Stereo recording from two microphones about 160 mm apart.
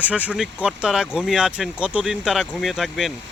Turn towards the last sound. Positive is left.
turn(degrees=0)  # may be behind; listen again after turning